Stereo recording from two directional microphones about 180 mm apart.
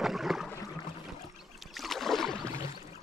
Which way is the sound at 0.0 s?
Centre (ahead or behind).